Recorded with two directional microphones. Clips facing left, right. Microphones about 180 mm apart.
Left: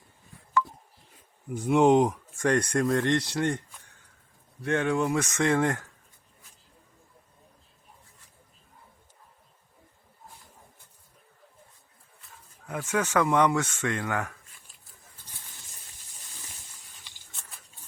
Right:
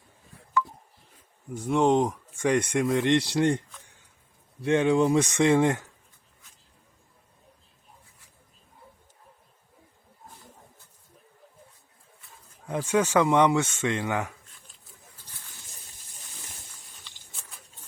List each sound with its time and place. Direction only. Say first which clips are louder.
1.5 s speech: left 2 dB; 5° left (ahead or behind)
3.0 s speech: right 3 dB; 20° right (ahead or behind)
4.6 s speech: right 4 dB; 20° right (ahead or behind)
12.6 s speech: right 4 dB; 25° right (ahead or behind)